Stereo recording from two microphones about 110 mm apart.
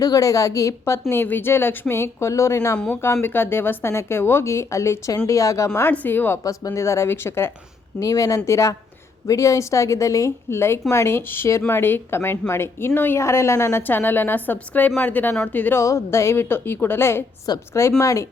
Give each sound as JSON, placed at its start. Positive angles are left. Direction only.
{"t": 0.0, "sound": "a woman's voice", "side_deg": 30}
{"t": 1.1, "sound": "a woman's voice", "side_deg": 20}
{"t": 2.7, "sound": "speech", "side_deg": 5}
{"t": 3.0, "sound": "a woman's voice", "side_deg": 20}
{"t": 5.9, "sound": "speech", "side_deg": 15}
{"t": 6.4, "sound": "a woman's voice", "side_deg": 30}
{"t": 7.9, "sound": "a woman's voice", "side_deg": 30}
{"t": 15.8, "sound": "a woman's voice", "side_deg": 25}